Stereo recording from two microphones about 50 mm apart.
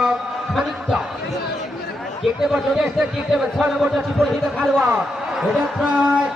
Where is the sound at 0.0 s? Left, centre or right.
Centre.